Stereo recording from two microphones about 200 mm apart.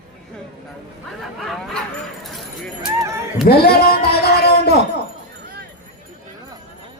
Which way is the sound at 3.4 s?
50° left (ahead or behind).